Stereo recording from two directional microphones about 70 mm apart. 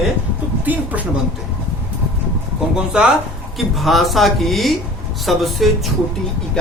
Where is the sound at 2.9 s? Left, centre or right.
Centre.